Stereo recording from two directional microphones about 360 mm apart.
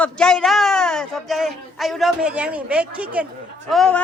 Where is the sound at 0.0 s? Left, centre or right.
Centre.